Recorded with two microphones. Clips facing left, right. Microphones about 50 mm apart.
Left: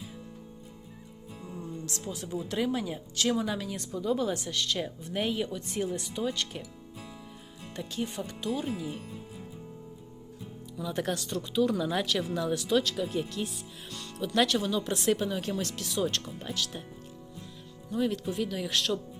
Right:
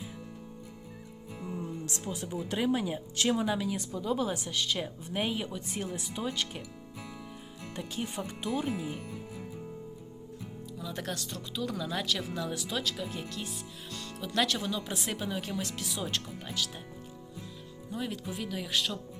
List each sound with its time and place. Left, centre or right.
1.4 s music: right
2.0 s a woman's voice: centre
7.8 s a woman's voice: centre
10.8 s speech: centre
11.8 s speech: centre
12.0 s a woman's voice: centre
17.9 s speech: centre